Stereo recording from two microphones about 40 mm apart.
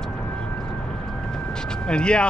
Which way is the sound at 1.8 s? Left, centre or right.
Left.